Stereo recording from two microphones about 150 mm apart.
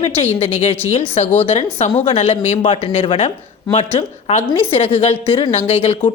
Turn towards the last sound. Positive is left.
turn(degrees=40)  # may be behind; listen again after turning